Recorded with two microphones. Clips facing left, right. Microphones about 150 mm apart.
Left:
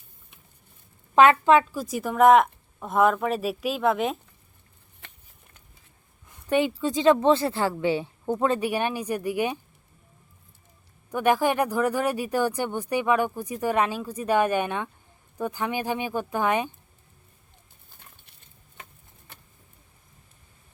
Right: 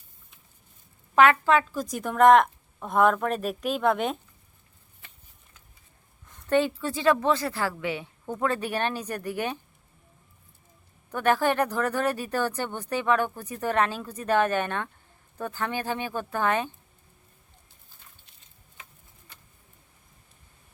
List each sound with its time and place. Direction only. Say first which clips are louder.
1.1 s speech: left 3 dB; 20° left (ahead or behind)
1.7 s speech: left 1 dB; 5° left (ahead or behind)
5.0 s a sound: left 4 dB; 70° left (ahead or behind)
6.2 s speech: even; 10° left (ahead or behind); by 8.4 s 30° left (ahead or behind)
8.4 s speech: left 2 dB; 15° left (ahead or behind)
11.1 s speech: left 1 dB; 10° left (ahead or behind)